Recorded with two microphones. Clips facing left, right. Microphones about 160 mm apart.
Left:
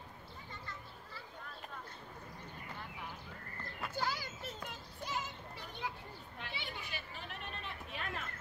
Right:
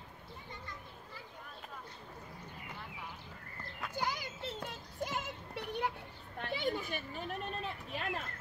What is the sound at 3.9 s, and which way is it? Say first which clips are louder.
Children playing: right 1 dB; 20° right (ahead or behind).